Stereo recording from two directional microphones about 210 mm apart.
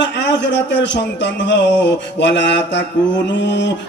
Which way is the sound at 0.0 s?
55° left (ahead or behind).